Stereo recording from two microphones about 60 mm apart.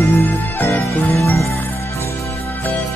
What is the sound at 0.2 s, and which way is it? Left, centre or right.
Music, left.